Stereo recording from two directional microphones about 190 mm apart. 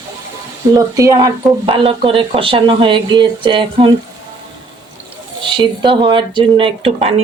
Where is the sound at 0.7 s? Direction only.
15° right (ahead or behind).